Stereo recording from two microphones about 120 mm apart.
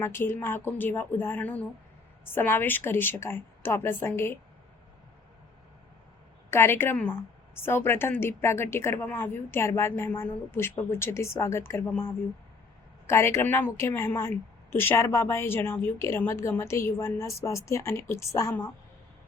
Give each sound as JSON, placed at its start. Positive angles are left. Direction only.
{"t": 0.0, "sound": "a woman's voice", "side_deg": 20}
{"t": 6.5, "sound": "a woman's voice", "side_deg": 20}